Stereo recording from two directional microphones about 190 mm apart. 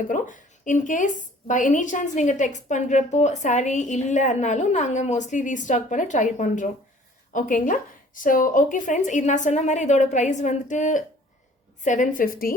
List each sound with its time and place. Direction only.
0.1 s a woman's voice: 45° left (ahead or behind)